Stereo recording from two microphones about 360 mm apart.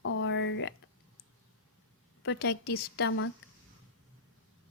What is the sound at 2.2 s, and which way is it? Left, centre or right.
Speech, left.